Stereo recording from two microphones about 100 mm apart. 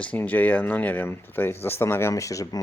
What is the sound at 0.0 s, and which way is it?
Speech, 15° left (ahead or behind).